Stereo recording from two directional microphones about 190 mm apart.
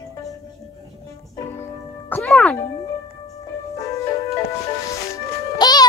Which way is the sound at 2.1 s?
5° left (ahead or behind).